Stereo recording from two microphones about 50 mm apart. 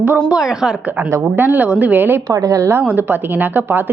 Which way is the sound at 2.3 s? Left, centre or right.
Right.